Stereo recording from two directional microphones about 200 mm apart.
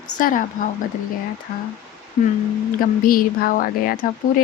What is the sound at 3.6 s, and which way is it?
Speech, 45° left (ahead or behind).